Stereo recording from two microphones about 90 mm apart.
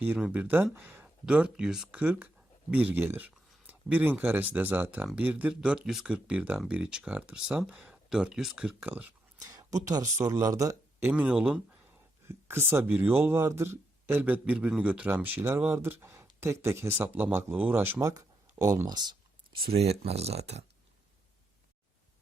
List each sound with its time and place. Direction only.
0.2 s a man's voice: 15° right (ahead or behind)
1.2 s a man's voice: 10° right (ahead or behind)
9.4 s speech: 45° right (ahead or behind)
11.1 s speech: 10° right (ahead or behind)
12.3 s a man's voice: 30° right (ahead or behind)
18.0 s a sound: 40° right (ahead or behind)
18.9 s speech: 50° right (ahead or behind)